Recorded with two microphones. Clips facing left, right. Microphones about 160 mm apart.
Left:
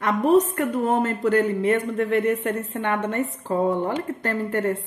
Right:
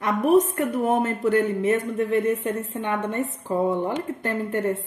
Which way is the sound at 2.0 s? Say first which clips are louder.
Left 1 dB; 75° left (ahead or behind).